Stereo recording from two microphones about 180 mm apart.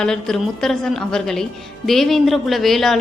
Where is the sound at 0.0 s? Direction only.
5° left (ahead or behind).